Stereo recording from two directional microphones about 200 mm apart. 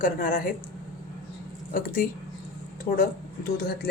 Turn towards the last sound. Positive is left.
turn(degrees=50)  # may be behind; listen again after turning